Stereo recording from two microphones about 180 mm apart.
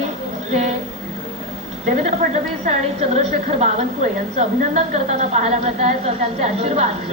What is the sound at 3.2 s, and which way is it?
A woman's voice, 40° right (ahead or behind).